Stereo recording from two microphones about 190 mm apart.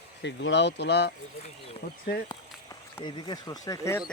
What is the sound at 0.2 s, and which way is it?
Speech, 65° left (ahead or behind).